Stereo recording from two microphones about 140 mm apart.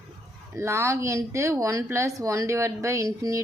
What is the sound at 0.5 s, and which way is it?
A woman's voice, 20° right (ahead or behind).